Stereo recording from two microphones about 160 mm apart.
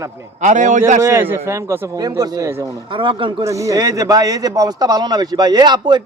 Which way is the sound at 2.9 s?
30° right (ahead or behind).